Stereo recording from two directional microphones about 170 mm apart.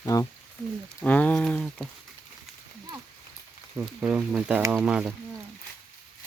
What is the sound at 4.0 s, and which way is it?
Speech, 5° right (ahead or behind).